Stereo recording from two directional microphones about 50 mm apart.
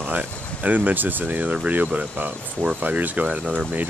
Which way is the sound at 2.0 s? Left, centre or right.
Right.